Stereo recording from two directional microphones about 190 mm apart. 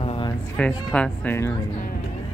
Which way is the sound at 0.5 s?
5° left (ahead or behind).